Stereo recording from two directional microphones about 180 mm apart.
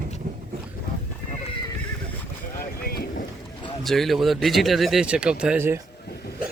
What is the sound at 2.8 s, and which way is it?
Boat, 55° left (ahead or behind).